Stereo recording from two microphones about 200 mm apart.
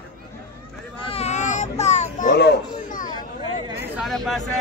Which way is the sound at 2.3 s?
55° left (ahead or behind).